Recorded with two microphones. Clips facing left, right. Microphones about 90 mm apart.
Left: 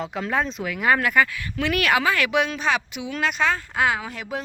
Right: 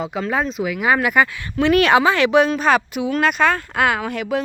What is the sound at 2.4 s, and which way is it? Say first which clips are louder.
Speech: right 7 dB; 40° right (ahead or behind).